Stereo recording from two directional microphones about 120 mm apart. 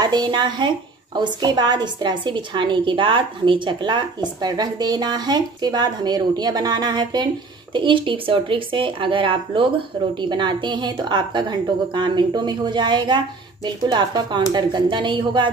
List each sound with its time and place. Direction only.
0.0 s a woman's voice: 35° right (ahead or behind)